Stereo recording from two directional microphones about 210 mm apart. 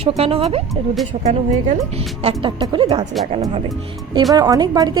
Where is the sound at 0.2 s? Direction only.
25° right (ahead or behind).